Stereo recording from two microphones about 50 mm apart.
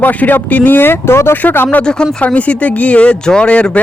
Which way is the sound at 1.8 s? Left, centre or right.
Centre.